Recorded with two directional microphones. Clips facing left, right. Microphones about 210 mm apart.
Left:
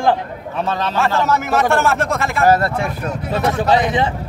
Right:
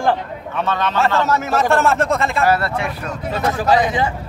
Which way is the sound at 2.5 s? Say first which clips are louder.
Left 3 dB; 45° left (ahead or behind).